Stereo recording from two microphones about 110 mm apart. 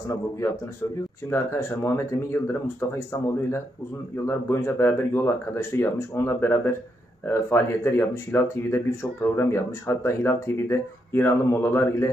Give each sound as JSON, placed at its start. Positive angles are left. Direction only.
{"t": 1.2, "sound": "speech", "side_deg": 30}